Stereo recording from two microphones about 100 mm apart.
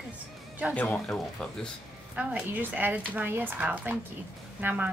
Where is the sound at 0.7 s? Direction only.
10° left (ahead or behind).